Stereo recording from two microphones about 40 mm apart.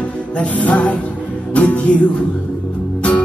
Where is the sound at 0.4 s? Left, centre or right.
Left.